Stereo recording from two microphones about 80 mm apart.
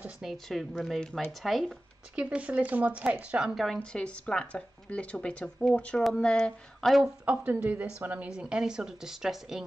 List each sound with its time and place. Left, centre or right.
0.2 s speech: centre
2.1 s speech: centre
3.5 s speech: centre
7.0 s a woman's voice: centre
8.3 s speech: centre